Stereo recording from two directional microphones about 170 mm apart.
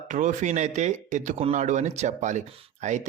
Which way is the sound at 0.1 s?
45° right (ahead or behind).